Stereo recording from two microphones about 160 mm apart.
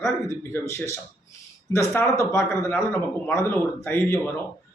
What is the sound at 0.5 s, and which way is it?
A man's voice, 20° left (ahead or behind).